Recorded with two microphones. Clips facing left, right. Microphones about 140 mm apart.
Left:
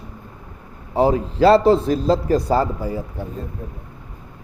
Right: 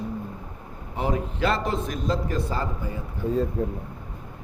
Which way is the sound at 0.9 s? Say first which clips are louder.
Left 10 dB; 35° left (ahead or behind).